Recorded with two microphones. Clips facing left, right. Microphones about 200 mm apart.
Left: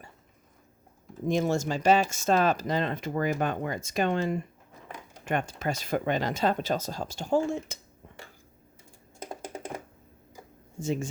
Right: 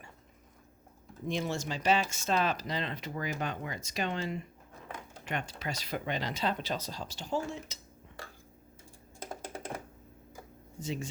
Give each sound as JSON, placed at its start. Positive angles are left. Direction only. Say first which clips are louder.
{"t": 1.2, "sound": "speech", "louder": "left 8 dB", "side_deg": 45}
{"t": 10.8, "sound": "speech", "louder": "left 7 dB", "side_deg": 50}